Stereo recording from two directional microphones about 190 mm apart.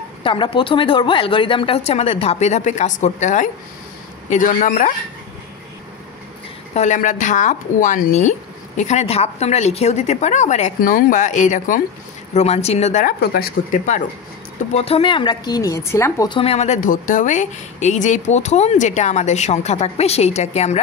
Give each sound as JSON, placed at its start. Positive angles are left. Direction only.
{"t": 0.2, "sound": "speech", "side_deg": 25}
{"t": 6.7, "sound": "speech", "side_deg": 40}
{"t": 13.2, "sound": "speech", "side_deg": 50}
{"t": 16.3, "sound": "speech", "side_deg": 30}